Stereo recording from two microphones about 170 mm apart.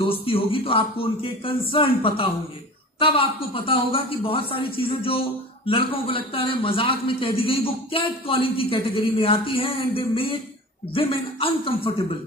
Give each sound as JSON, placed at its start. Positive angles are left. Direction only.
{"t": 0.2, "sound": "a man's voice", "side_deg": 30}